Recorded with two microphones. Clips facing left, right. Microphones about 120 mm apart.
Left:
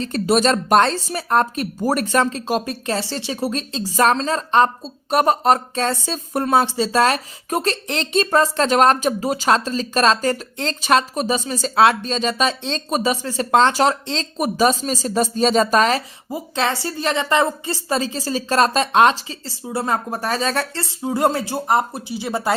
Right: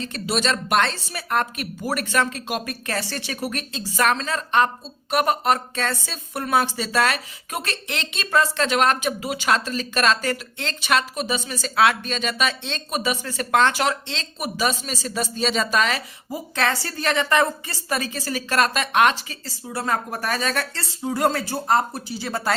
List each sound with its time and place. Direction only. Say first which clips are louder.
0.0 s speech: left 7 dB; 40° left (ahead or behind)
16.3 s a woman's voice: left 2 dB; 20° left (ahead or behind)